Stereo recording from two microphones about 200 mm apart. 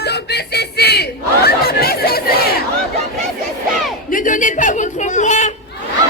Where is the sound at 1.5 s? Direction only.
50° left (ahead or behind).